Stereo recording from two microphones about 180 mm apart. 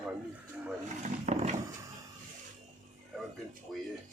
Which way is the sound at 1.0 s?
40° right (ahead or behind).